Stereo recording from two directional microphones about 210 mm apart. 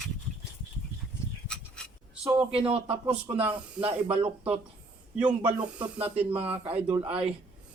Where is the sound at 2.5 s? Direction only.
25° right (ahead or behind).